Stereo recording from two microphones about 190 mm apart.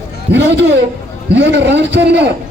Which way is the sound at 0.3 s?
10° right (ahead or behind).